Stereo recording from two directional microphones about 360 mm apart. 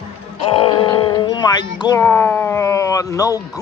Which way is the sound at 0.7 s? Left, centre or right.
Centre.